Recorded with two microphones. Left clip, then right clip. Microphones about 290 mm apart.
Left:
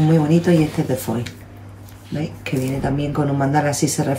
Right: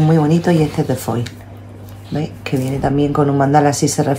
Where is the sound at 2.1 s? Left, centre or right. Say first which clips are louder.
Right 4 dB; centre.